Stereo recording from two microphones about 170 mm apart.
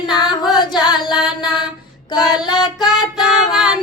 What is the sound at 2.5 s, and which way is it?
Child singing, 25° left (ahead or behind).